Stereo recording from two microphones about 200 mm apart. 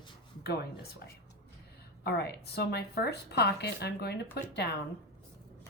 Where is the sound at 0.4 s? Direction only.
50° left (ahead or behind).